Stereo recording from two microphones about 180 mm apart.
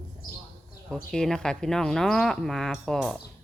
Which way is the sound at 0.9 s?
5° left (ahead or behind).